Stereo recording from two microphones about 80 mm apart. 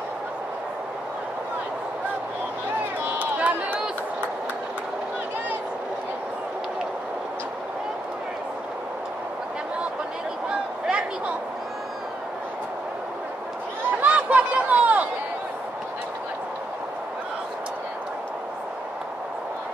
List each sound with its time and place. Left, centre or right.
3.2 s run: centre
10.9 s a sound: centre
14.0 s run: centre